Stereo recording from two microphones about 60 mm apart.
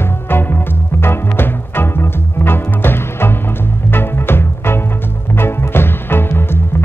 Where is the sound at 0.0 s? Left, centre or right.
Left.